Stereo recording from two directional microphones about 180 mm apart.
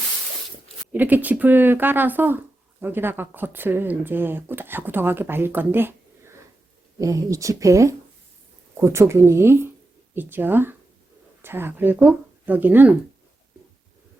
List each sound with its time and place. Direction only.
0.9 s speech: 10° right (ahead or behind)